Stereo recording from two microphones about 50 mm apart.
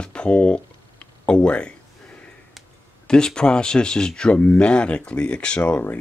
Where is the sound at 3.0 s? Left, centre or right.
Centre.